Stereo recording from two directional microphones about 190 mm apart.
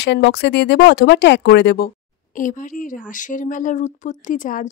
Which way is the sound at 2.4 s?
45° left (ahead or behind).